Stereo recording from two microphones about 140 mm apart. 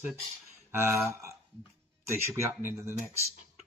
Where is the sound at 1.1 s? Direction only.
20° right (ahead or behind).